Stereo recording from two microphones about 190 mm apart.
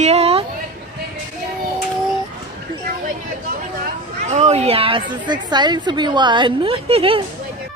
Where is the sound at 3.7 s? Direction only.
40° right (ahead or behind).